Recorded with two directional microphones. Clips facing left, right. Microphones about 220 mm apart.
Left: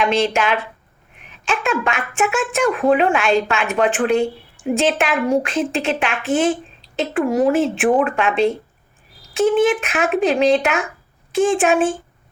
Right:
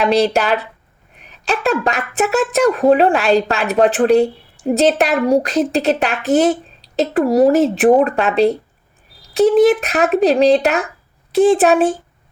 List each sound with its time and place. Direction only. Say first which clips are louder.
0.0 s a woman's voice: right 3 dB; 40° right (ahead or behind)